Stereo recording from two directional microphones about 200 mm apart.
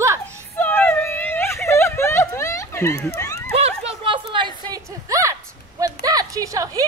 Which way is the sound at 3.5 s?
30° right (ahead or behind).